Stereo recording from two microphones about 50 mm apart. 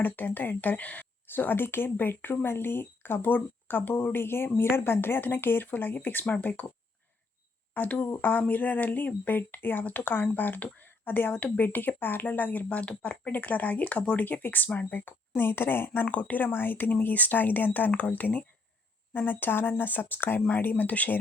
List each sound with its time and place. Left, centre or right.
0.0 s speech: left
1.3 s speech: left
7.7 s speech: left
12.7 s speech: left
16.0 s speech: left